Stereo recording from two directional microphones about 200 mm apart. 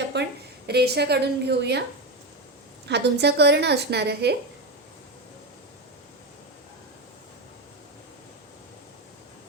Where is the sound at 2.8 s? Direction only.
55° right (ahead or behind).